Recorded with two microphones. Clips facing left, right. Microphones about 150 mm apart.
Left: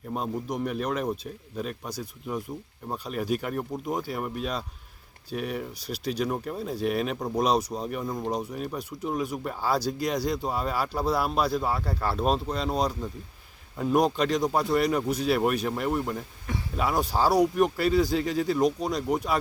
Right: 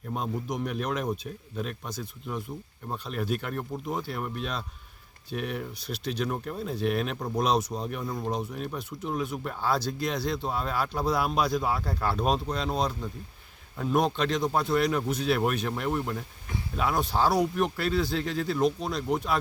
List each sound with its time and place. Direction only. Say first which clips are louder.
0.1 s speech: left 1 dB; 5° left (ahead or behind)